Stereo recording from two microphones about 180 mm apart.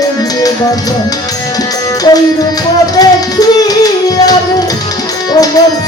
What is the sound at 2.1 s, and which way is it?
Music, 25° left (ahead or behind).